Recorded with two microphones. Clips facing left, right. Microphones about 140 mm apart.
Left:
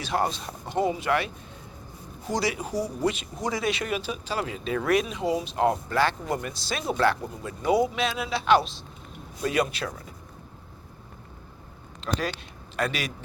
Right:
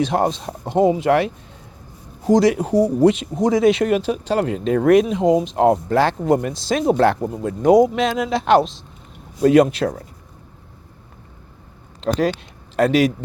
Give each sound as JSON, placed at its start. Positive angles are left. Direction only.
{"t": 0.1, "sound": "speech", "side_deg": -85}
{"t": 0.6, "sound": "speech", "side_deg": -25}
{"t": 2.3, "sound": "speech", "side_deg": -90}
{"t": 11.9, "sound": "speech", "side_deg": -90}